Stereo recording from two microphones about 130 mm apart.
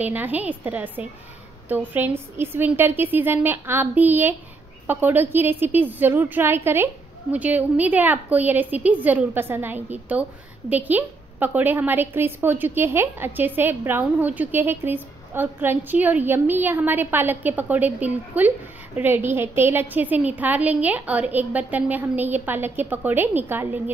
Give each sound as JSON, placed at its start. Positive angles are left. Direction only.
{"t": 0.0, "sound": "a woman's voice", "side_deg": -15}